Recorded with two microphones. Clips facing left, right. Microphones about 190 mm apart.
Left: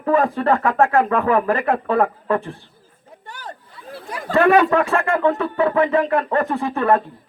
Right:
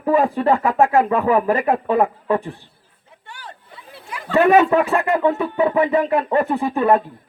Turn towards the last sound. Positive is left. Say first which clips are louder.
# right 2 dB
turn(degrees=-15)  # may be behind; listen again after turning